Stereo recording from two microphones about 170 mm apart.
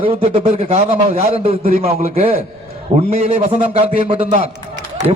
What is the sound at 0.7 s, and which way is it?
A man's voice, 35° right (ahead or behind).